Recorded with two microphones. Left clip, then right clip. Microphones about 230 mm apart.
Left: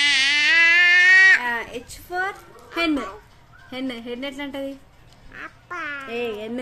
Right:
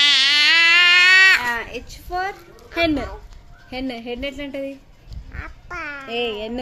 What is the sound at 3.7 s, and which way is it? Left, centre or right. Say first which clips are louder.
Child singing: right 2 dB; centre.